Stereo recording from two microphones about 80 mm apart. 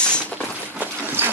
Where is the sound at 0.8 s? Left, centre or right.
Right.